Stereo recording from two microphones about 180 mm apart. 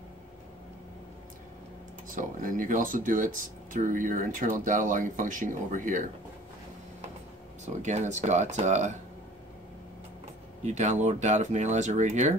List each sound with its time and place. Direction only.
2.1 s speech: 50° right (ahead or behind)
7.6 s speech: 40° right (ahead or behind)
10.6 s speech: 40° right (ahead or behind)